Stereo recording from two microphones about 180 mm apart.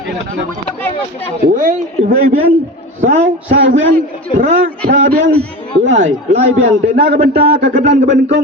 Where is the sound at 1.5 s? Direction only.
50° right (ahead or behind).